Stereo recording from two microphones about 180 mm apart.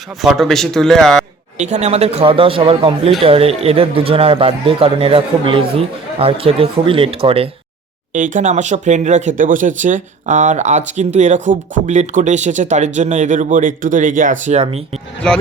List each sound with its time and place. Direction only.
0.2 s speech: centre (ahead or behind)
1.5 s a man's voice: 40° right (ahead or behind)
8.1 s a man's voice: 45° right (ahead or behind)